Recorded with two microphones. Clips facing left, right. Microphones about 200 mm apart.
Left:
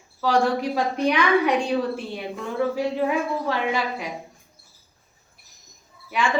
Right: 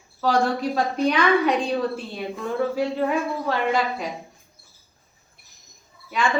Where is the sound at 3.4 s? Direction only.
15° left (ahead or behind).